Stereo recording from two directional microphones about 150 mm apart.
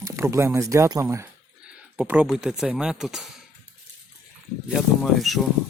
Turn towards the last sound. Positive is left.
turn(degrees=0)  # may be behind; listen again after turning